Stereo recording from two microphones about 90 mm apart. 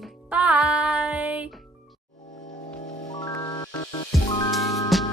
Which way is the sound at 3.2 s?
50° left (ahead or behind).